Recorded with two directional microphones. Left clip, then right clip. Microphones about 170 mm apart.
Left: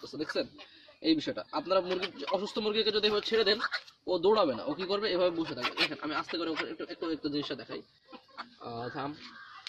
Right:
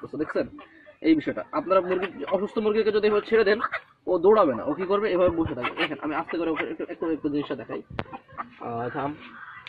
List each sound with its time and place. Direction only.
0.2 s speech: 45° left (ahead or behind)
8.7 s speech: 35° left (ahead or behind)